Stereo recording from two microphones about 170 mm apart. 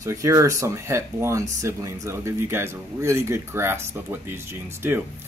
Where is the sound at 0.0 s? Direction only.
20° right (ahead or behind).